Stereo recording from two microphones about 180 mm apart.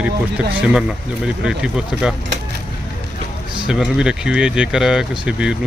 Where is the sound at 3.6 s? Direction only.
5° right (ahead or behind).